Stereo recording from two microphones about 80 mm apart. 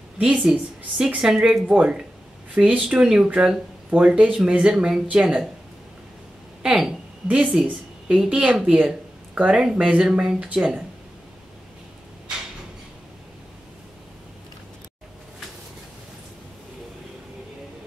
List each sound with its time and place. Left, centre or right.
0.2 s a woman's voice: centre
1.7 s speech: centre
6.6 s a sound: centre
7.6 s speech: centre